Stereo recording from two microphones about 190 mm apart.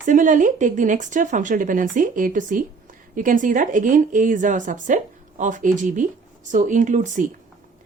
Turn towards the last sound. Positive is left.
turn(degrees=-40)  # may be behind; listen again after turning